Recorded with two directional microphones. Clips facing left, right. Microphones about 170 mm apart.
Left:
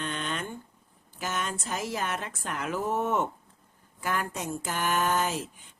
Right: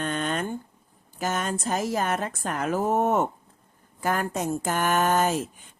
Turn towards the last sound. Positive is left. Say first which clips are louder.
# right 5 dB
turn(degrees=-45)  # may be behind; listen again after turning